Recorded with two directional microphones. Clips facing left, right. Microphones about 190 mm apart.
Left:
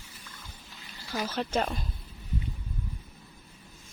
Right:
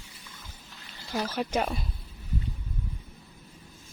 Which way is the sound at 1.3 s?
10° right (ahead or behind).